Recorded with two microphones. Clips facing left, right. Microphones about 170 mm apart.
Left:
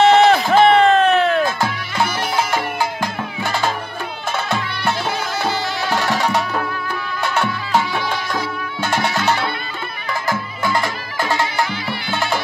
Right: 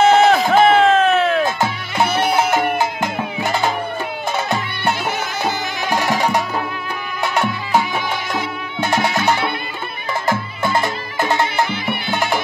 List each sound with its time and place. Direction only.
0.0 s a sound: centre (ahead or behind)
1.4 s music: 20° right (ahead or behind)
5.4 s music: 20° right (ahead or behind)
8.9 s music: 20° right (ahead or behind)